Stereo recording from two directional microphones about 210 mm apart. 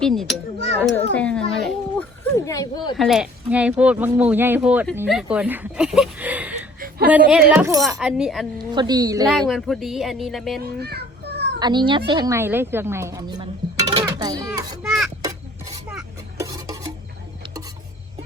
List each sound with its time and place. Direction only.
0.0 s a child's voice: centre (ahead or behind)
2.3 s a child's voice: 15° left (ahead or behind)
2.9 s speech: centre (ahead or behind)
6.7 s a sound: 45° right (ahead or behind)
7.1 s speech: 5° right (ahead or behind)
7.9 s speech: centre (ahead or behind)
8.5 s a woman's voice: 20° right (ahead or behind)
9.3 s speech: centre (ahead or behind)
10.8 s children playing: 50° right (ahead or behind)
11.6 s speech: 20° right (ahead or behind)
14.8 s speech: centre (ahead or behind)
15.9 s a sound: 5° right (ahead or behind)
16.5 s stir: 15° right (ahead or behind)